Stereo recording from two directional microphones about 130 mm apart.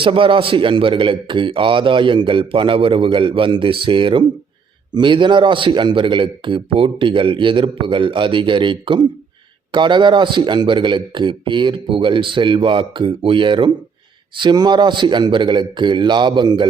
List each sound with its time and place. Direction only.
0.0 s a man's voice: 40° right (ahead or behind)